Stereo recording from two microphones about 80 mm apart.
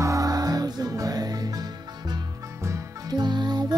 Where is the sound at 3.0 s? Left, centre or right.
Right.